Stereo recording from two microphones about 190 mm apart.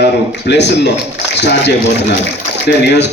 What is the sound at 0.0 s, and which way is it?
A man's voice, 65° left (ahead or behind).